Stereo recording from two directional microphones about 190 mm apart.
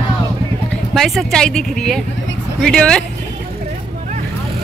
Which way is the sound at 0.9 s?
Centre (ahead or behind).